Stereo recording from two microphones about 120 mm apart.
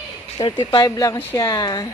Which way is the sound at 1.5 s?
35° left (ahead or behind).